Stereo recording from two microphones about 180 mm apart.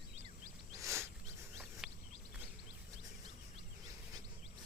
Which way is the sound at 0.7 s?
15° right (ahead or behind).